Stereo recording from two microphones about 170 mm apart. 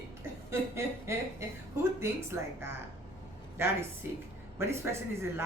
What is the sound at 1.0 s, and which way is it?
A woman's voice, 15° right (ahead or behind).